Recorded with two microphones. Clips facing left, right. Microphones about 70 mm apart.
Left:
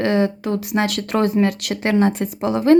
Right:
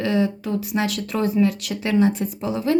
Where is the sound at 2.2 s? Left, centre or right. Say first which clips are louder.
Left 6 dB; left.